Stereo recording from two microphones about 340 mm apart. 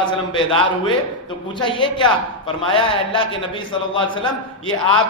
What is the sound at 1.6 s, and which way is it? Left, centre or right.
Speech, centre.